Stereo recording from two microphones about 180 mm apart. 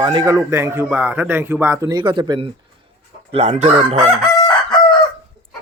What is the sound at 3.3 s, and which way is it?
Speech, 35° right (ahead or behind).